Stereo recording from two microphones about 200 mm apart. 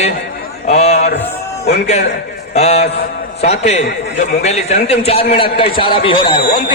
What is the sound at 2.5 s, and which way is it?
A man's voice, 35° left (ahead or behind).